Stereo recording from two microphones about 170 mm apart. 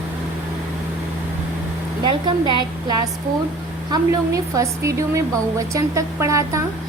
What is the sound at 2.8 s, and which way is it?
A woman's voice, 20° right (ahead or behind).